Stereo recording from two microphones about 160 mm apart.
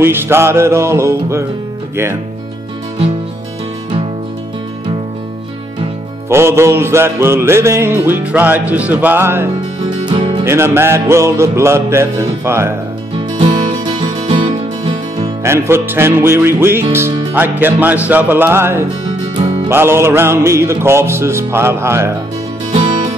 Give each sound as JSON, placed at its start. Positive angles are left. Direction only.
{"t": 0.0, "sound": "music", "side_deg": -15}
{"t": 6.2, "sound": "music", "side_deg": -15}
{"t": 10.0, "sound": "music", "side_deg": -30}
{"t": 10.4, "sound": "music", "side_deg": -15}
{"t": 13.4, "sound": "music", "side_deg": -30}
{"t": 15.4, "sound": "music", "side_deg": -15}
{"t": 19.3, "sound": "music", "side_deg": -30}
{"t": 19.7, "sound": "music", "side_deg": -15}